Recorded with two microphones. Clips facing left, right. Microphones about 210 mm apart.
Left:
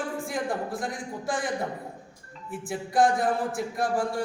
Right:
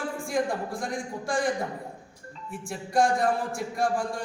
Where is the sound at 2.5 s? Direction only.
5° left (ahead or behind).